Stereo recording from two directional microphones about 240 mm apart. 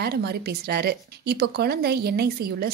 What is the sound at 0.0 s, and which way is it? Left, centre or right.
Speech, right.